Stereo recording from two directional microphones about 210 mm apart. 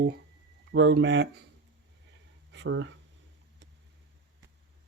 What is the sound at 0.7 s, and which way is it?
Speech, 60° right (ahead or behind).